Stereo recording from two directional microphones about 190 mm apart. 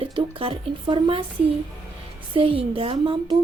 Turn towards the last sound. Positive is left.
turn(degrees=-25)  # may be behind; listen again after turning